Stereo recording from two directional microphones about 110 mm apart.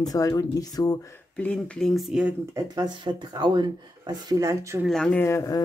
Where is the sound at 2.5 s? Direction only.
40° right (ahead or behind).